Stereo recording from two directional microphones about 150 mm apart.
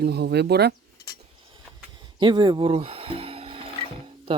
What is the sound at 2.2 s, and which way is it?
Speech, 30° right (ahead or behind).